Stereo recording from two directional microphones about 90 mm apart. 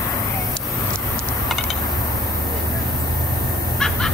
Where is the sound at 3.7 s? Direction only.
5° left (ahead or behind).